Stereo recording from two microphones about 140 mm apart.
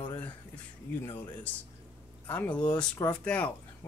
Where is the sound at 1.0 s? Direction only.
15° left (ahead or behind).